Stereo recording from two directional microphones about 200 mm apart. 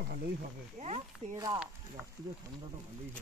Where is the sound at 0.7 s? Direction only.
35° right (ahead or behind).